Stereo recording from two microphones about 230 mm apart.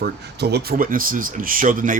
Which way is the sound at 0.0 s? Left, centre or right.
Right.